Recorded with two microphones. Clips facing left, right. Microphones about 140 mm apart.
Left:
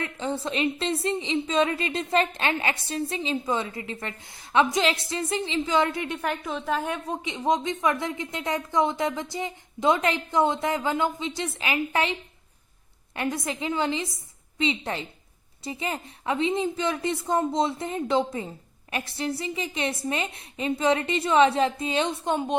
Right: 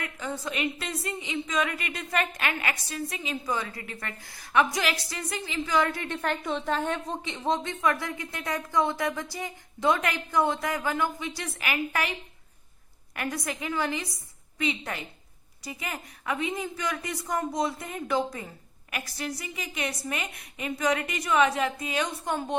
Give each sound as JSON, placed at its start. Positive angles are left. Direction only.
{"t": 0.0, "sound": "a woman's voice", "side_deg": 30}
{"t": 6.4, "sound": "a woman's voice", "side_deg": 5}
{"t": 13.1, "sound": "a woman's voice", "side_deg": 25}